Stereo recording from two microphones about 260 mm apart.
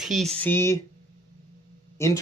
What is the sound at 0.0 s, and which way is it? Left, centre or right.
Speech, centre.